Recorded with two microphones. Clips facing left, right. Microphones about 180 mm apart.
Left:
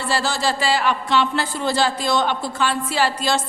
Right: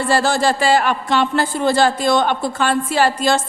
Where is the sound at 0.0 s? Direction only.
50° right (ahead or behind).